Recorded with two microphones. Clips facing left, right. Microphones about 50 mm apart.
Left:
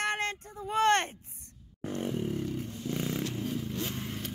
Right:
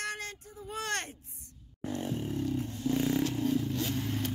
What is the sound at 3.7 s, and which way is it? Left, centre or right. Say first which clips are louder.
Vehicle: right 3 dB; centre.